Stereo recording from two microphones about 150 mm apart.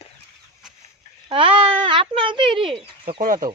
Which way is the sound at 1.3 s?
35° right (ahead or behind).